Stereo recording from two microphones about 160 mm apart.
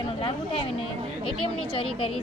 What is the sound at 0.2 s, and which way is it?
A woman's voice, 35° left (ahead or behind).